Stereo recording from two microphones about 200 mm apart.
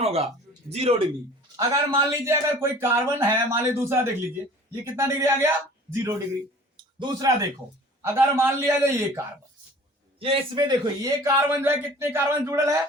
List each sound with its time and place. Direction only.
0.0 s a man's voice: 30° right (ahead or behind)
1.5 s a man's voice: 15° right (ahead or behind)
6.7 s a sound: 20° right (ahead or behind)
8.0 s a man's voice: 15° right (ahead or behind)
10.2 s a man's voice: 30° right (ahead or behind)